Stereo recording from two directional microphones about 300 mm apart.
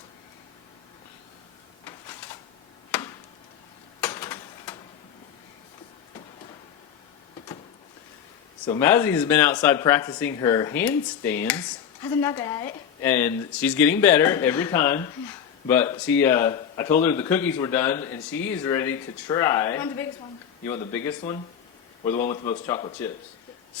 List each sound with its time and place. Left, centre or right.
4.0 s a sound: centre
8.6 s speech: centre
22.1 s a man's voice: left
22.6 s speech: centre